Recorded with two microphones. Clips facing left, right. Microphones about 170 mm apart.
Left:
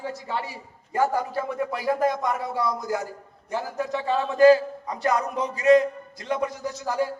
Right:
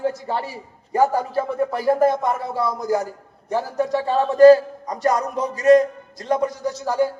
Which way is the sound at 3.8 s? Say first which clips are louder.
Right 5 dB; 35° right (ahead or behind).